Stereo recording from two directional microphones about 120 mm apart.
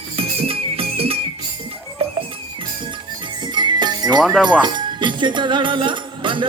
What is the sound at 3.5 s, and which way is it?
Jingle bell, 40° right (ahead or behind).